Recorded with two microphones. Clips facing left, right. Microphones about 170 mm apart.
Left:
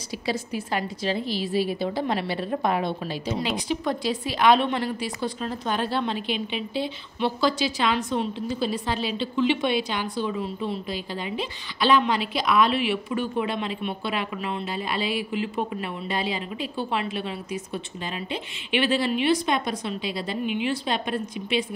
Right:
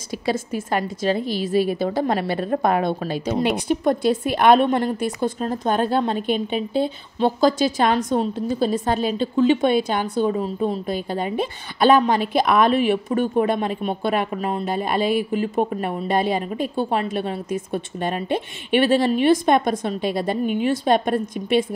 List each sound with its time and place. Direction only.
0.3 s a woman's voice: 50° right (ahead or behind)